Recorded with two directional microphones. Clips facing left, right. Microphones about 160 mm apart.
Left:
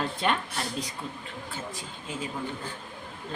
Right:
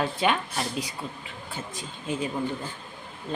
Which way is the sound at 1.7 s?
20° right (ahead or behind).